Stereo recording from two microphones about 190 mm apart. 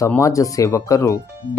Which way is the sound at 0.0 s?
15° left (ahead or behind).